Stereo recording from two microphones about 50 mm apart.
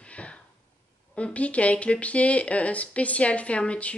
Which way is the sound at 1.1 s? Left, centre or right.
Left.